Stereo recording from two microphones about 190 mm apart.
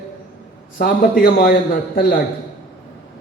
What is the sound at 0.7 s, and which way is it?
Speech, 50° left (ahead or behind).